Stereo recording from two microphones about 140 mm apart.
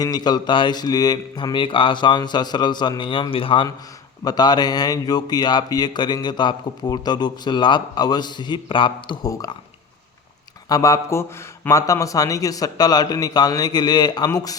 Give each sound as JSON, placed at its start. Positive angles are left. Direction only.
{"t": 0.0, "sound": "speech", "side_deg": 30}
{"t": 4.2, "sound": "speech", "side_deg": 30}
{"t": 10.7, "sound": "speech", "side_deg": 25}